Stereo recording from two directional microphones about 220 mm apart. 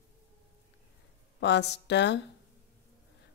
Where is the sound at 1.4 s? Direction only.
50° left (ahead or behind).